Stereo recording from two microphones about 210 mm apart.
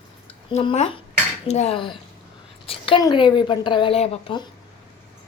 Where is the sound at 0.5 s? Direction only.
30° left (ahead or behind).